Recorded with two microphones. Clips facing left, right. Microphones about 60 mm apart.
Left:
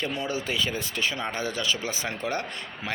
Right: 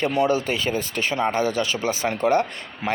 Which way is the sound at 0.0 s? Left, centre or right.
Right.